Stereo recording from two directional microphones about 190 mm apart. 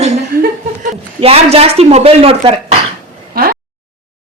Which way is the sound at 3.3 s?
50° right (ahead or behind).